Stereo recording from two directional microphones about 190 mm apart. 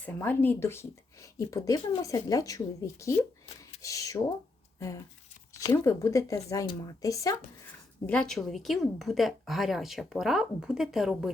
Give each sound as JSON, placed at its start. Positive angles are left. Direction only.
{"t": 0.0, "sound": "speech", "side_deg": 10}
{"t": 5.5, "sound": "speech", "side_deg": 15}
{"t": 8.0, "sound": "a woman's voice", "side_deg": 5}